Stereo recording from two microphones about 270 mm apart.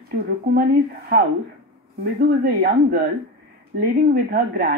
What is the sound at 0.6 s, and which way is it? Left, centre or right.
A woman's voice, right.